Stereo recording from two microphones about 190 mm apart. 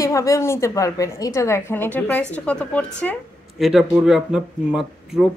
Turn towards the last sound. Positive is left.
turn(degrees=0)  # may be behind; listen again after turning